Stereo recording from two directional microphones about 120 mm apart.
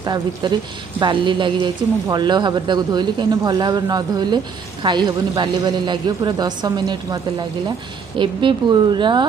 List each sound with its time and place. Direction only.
0.0 s a woman's voice: 35° right (ahead or behind)